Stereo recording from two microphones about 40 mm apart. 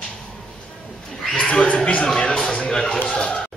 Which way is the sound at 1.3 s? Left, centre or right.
Left.